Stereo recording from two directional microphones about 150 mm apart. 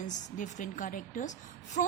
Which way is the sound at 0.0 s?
55° left (ahead or behind).